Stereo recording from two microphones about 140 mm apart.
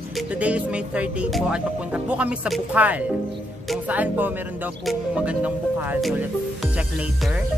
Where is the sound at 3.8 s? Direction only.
10° right (ahead or behind).